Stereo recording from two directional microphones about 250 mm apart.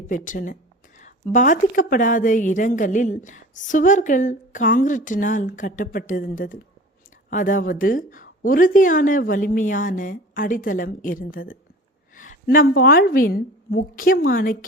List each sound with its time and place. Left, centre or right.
0.1 s a woman's voice: left